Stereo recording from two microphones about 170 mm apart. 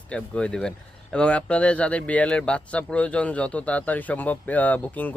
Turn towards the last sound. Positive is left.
turn(degrees=10)  # may be behind; listen again after turning